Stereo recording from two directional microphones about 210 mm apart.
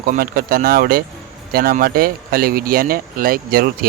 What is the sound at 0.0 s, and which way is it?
Speech, 45° right (ahead or behind).